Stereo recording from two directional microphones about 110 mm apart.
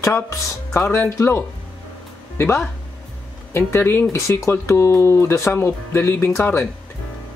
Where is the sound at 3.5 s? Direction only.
20° left (ahead or behind).